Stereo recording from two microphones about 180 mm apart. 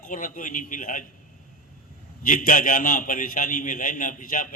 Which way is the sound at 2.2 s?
50° left (ahead or behind).